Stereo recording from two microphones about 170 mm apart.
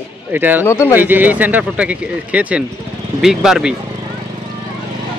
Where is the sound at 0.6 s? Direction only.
15° left (ahead or behind).